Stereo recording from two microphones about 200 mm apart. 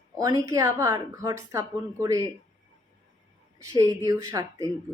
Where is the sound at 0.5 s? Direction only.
15° right (ahead or behind).